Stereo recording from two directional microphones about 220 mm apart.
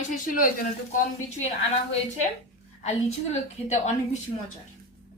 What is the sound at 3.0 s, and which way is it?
A woman's voice, 30° left (ahead or behind).